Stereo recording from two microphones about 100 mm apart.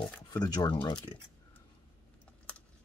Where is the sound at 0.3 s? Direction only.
40° left (ahead or behind).